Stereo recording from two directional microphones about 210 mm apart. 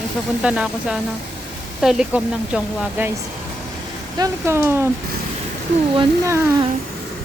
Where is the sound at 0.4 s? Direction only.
5° right (ahead or behind).